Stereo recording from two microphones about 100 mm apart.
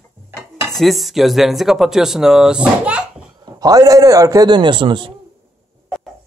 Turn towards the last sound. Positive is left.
turn(degrees=-55)  # may be behind; listen again after turning